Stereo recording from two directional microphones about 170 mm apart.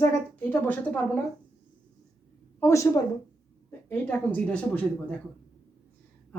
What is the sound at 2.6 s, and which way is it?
A woman's voice, 15° left (ahead or behind).